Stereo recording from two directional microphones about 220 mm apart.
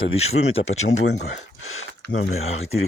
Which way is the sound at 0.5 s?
65° left (ahead or behind).